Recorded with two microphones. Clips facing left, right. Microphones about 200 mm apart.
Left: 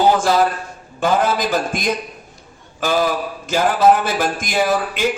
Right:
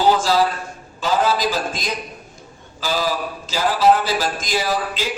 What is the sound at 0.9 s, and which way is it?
A man's voice, 55° left (ahead or behind).